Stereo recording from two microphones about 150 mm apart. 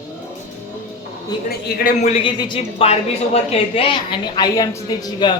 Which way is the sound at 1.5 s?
90° left.